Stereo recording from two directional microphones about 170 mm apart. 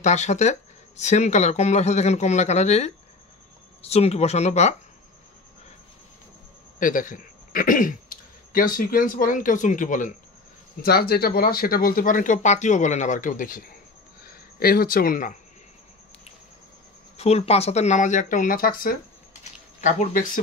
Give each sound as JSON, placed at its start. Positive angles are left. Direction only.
{"t": 0.0, "sound": "speech", "side_deg": 40}
{"t": 6.8, "sound": "speech", "side_deg": 50}
{"t": 10.8, "sound": "speech", "side_deg": 65}
{"t": 17.2, "sound": "speech", "side_deg": 40}